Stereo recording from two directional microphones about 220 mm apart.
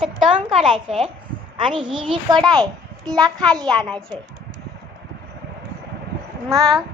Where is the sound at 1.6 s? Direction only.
20° right (ahead or behind).